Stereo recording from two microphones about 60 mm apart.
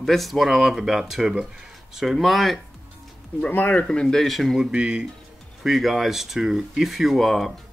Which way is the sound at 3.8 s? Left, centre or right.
Centre.